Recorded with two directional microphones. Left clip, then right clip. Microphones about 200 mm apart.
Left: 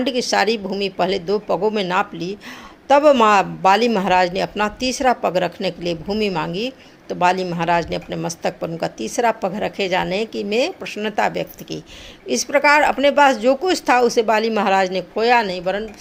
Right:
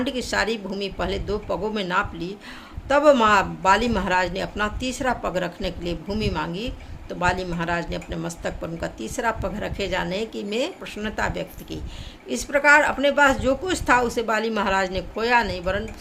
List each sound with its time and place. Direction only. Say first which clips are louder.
0.0 s a man's voice: left 6 dB; 20° left (ahead or behind)